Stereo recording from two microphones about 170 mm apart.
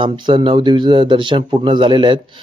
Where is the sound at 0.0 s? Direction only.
25° right (ahead or behind).